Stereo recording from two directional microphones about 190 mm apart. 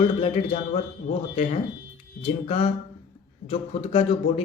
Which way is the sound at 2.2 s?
30° left (ahead or behind).